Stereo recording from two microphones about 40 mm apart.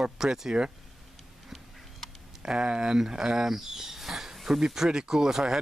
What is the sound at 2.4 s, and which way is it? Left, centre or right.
Speech, right.